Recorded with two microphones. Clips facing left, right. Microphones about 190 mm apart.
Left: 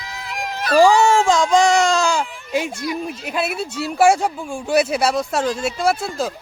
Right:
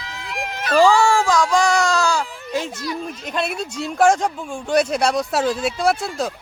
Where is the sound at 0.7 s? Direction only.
15° left (ahead or behind).